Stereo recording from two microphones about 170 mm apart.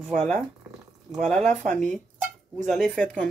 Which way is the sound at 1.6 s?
45° right (ahead or behind).